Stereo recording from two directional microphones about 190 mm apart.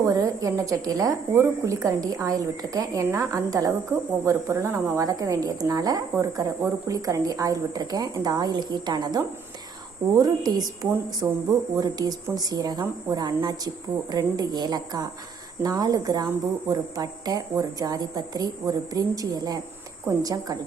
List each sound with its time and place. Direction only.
0.0 s speech: 20° right (ahead or behind)